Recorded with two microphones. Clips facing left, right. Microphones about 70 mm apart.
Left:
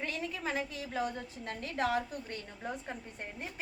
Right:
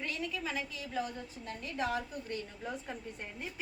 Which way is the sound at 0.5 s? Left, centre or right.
Left.